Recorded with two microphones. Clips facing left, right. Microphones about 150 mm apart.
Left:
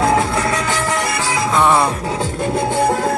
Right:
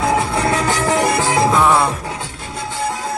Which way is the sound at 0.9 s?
15° right (ahead or behind).